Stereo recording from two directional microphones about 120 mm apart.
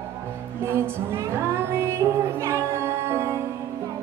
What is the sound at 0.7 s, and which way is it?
Music, 20° right (ahead or behind).